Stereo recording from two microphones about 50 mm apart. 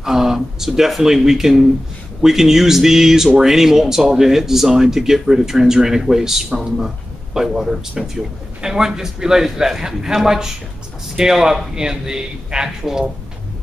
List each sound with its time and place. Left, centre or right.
0.0 s speech: centre